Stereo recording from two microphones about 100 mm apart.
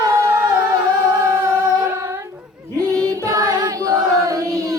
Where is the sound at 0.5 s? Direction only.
45° right (ahead or behind).